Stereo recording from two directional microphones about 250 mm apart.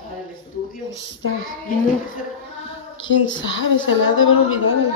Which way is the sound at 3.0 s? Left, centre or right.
Left.